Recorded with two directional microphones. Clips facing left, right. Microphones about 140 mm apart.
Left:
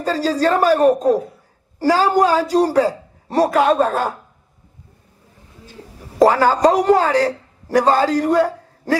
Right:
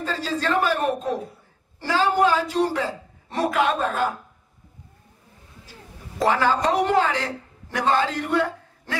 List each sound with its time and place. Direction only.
0.0 s a man's voice: 40° left (ahead or behind)
6.1 s a woman's voice: 40° left (ahead or behind)